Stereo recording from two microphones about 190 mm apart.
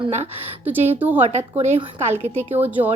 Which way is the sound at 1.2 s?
35° right (ahead or behind).